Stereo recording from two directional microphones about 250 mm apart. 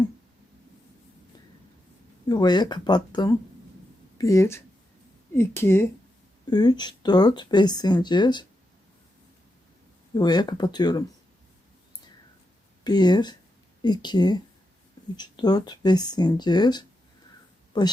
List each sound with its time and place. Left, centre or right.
2.3 s speech: centre
10.2 s speech: centre
12.8 s speech: centre